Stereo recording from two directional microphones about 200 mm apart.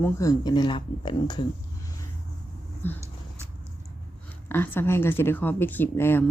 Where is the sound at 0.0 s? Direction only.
15° left (ahead or behind).